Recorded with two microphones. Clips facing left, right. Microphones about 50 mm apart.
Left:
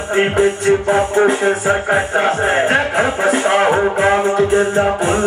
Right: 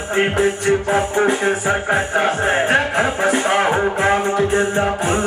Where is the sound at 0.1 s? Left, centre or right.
Centre.